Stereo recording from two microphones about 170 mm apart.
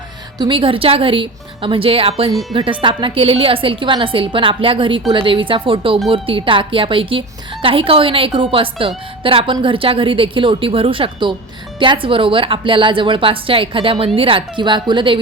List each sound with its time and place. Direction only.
0.3 s a woman's voice: 30° right (ahead or behind)